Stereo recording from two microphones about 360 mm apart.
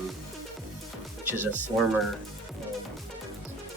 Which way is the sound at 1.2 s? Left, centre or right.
Centre.